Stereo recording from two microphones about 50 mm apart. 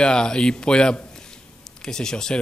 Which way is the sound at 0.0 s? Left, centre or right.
Centre.